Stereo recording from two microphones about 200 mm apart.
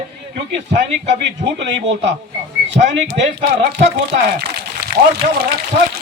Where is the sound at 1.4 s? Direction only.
60° right (ahead or behind).